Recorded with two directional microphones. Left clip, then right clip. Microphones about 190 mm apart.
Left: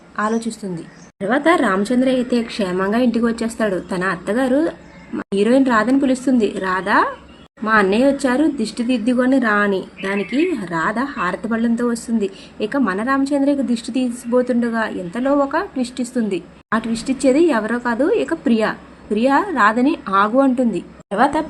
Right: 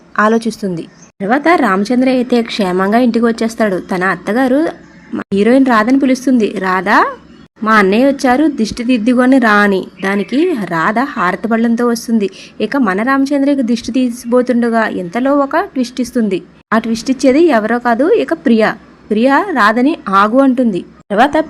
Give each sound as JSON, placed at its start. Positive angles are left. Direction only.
{"t": 0.2, "sound": "a woman's voice", "side_deg": -35}